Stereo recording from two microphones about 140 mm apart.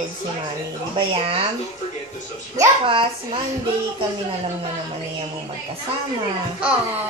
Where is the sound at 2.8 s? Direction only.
40° right (ahead or behind).